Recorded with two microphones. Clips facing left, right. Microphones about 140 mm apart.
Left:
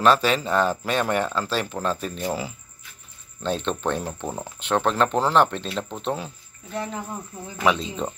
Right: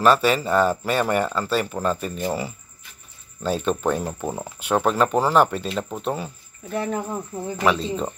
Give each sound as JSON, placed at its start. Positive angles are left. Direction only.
{"t": 0.0, "sound": "speech", "side_deg": -5}
{"t": 6.7, "sound": "speech", "side_deg": -50}
{"t": 7.6, "sound": "speech", "side_deg": 0}